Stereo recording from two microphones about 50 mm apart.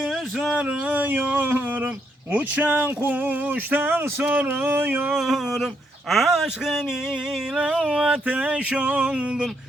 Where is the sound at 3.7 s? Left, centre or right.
Right.